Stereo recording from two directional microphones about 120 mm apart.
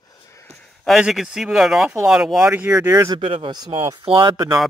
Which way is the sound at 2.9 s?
30° right (ahead or behind).